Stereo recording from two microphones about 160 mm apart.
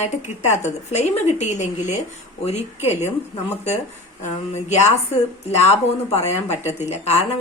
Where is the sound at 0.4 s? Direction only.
45° left (ahead or behind).